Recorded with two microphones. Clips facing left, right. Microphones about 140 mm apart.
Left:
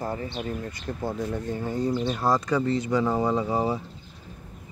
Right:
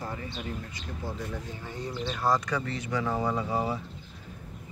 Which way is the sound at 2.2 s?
30° left (ahead or behind).